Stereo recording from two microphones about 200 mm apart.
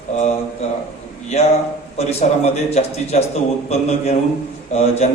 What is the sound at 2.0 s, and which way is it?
A man's voice, 30° left (ahead or behind).